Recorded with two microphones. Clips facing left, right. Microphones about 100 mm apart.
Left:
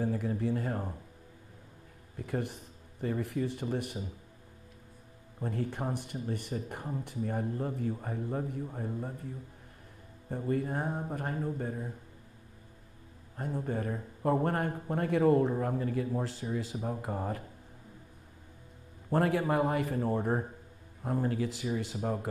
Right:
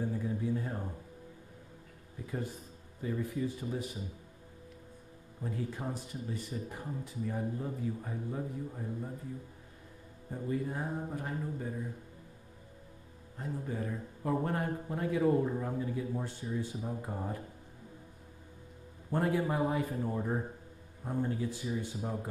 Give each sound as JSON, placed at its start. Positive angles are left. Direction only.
{"t": 0.0, "sound": "a sound", "side_deg": 85}
{"t": 2.1, "sound": "speech", "side_deg": 75}
{"t": 5.4, "sound": "speech", "side_deg": 60}
{"t": 10.3, "sound": "speech", "side_deg": 60}
{"t": 13.4, "sound": "speech", "side_deg": 55}
{"t": 19.0, "sound": "a man's voice", "side_deg": 75}
{"t": 21.0, "sound": "a man's voice", "side_deg": 85}